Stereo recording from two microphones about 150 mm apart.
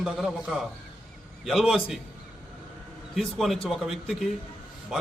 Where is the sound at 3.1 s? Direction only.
Centre (ahead or behind).